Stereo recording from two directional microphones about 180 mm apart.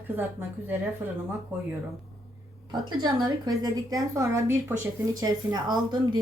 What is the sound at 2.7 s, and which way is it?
A woman's voice, 25° right (ahead or behind).